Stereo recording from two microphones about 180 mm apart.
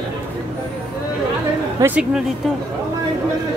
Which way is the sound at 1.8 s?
5° right (ahead or behind).